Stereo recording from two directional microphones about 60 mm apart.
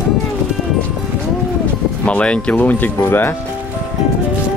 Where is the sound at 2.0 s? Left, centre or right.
Centre.